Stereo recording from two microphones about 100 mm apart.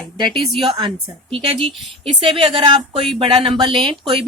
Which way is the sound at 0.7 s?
60° right (ahead or behind).